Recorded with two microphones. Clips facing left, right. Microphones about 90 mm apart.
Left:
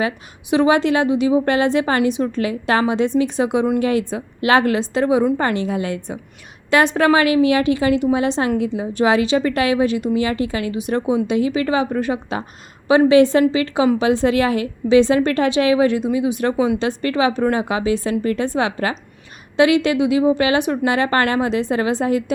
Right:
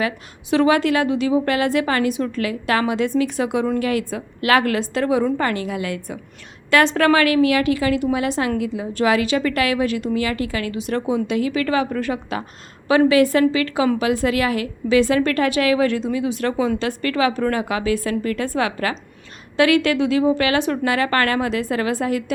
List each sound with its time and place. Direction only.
0.5 s a woman's voice: 20° left (ahead or behind)